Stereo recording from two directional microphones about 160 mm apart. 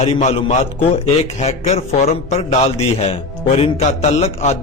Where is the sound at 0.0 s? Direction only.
40° left (ahead or behind).